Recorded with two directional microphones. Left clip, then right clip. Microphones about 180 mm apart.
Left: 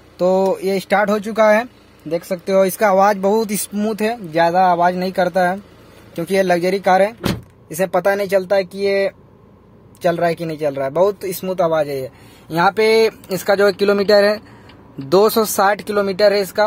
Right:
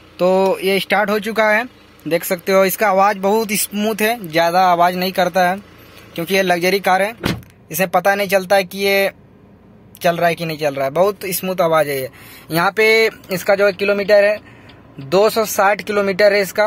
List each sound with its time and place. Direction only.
0.5 s speech: 10° left (ahead or behind)
13.3 s speech: 15° left (ahead or behind)
15.6 s speech: 15° left (ahead or behind)